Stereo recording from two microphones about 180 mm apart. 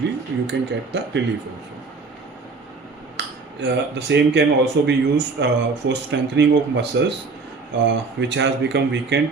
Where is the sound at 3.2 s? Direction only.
70° right (ahead or behind).